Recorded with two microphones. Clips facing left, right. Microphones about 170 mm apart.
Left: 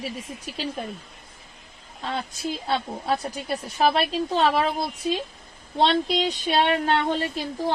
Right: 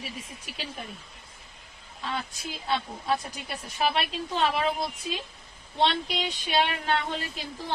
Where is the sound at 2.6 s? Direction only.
40° left (ahead or behind).